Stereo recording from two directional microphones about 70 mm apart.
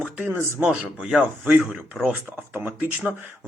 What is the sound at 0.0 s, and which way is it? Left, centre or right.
Speech, right.